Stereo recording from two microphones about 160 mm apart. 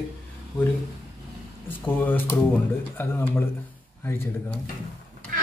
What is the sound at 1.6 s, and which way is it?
Speech, 10° left (ahead or behind).